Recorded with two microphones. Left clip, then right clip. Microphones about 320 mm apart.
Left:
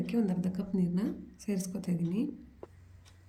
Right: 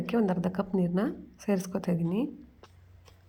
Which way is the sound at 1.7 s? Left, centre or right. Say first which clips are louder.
Right 8 dB; right.